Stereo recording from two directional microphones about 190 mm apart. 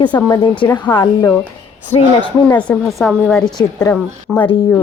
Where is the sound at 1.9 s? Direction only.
35° left (ahead or behind).